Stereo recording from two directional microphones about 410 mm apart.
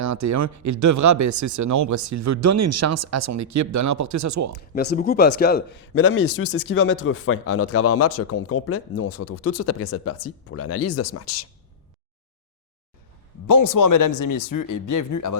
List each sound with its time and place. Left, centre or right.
0.0 s speech: right
4.7 s a man's voice: left
13.5 s speech: left